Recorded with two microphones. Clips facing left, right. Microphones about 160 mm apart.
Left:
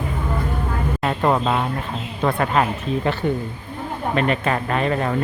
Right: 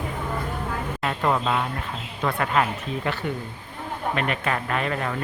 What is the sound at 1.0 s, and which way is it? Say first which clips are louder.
Music: left 4 dB; 35° left (ahead or behind).